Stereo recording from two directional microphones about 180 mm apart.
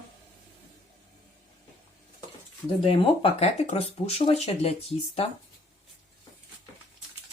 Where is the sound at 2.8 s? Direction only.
30° left (ahead or behind).